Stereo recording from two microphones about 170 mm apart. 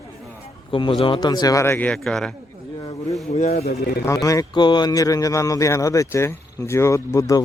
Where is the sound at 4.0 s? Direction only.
20° left (ahead or behind).